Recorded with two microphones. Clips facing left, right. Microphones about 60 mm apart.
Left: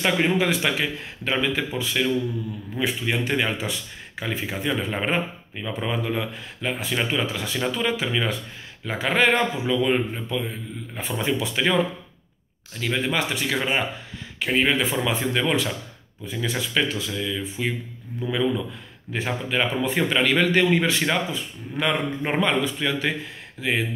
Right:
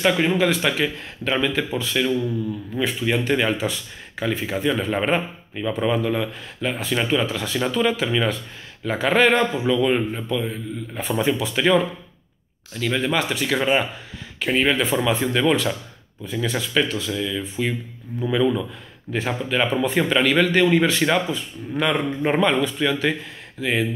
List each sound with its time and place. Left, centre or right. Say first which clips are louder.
0.0 s a man's voice: right 2 dB; centre
18.2 s a man's voice: right 4 dB; centre